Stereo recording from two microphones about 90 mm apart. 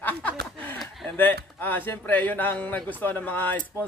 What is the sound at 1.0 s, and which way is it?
A man's voice, 20° left (ahead or behind).